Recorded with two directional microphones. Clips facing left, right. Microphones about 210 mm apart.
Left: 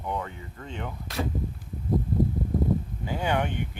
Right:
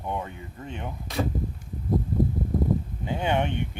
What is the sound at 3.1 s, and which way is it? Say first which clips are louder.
Speech: right 2 dB; 25° right (ahead or behind).